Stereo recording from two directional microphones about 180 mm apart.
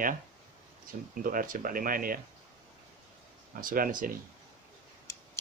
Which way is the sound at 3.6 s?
50° right (ahead or behind).